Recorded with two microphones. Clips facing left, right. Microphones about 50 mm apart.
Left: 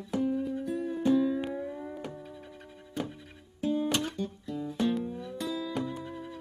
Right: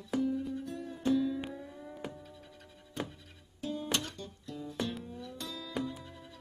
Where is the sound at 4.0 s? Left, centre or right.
Centre.